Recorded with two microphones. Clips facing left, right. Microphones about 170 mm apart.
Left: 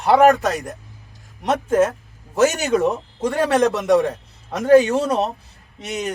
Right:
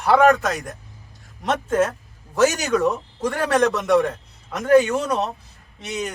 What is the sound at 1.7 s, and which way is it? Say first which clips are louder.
Speech: left 4 dB; 20° left (ahead or behind).